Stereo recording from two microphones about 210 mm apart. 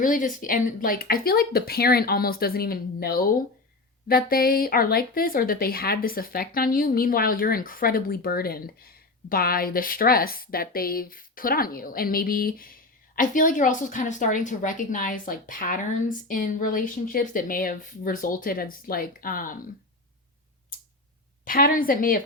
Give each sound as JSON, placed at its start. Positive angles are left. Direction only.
{"t": 0.0, "sound": "speech", "side_deg": 40}
{"t": 21.4, "sound": "speech", "side_deg": 40}